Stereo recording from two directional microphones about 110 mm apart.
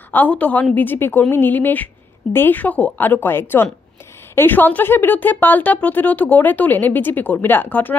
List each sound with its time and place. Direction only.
0.1 s a woman's voice: 15° left (ahead or behind)